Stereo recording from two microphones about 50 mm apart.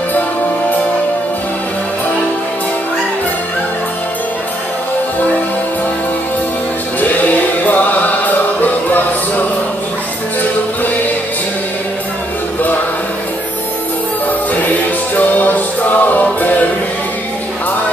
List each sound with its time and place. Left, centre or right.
7.6 s music: left
15.1 s music: left